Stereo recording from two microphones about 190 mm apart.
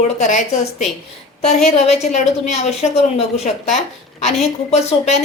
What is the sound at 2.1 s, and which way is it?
A woman's voice, 35° left (ahead or behind).